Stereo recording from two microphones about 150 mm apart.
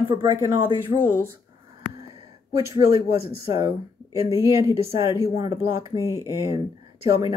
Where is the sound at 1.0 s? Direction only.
15° right (ahead or behind).